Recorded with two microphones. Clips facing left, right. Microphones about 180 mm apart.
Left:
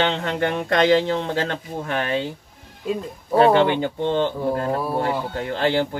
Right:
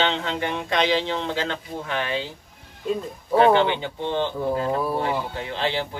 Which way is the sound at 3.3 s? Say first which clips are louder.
Left 2 dB; 45° left (ahead or behind).